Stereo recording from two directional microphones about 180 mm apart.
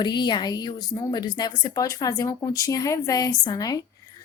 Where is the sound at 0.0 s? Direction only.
25° left (ahead or behind).